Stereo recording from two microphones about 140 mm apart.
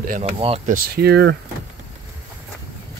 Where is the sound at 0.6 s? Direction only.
90° right.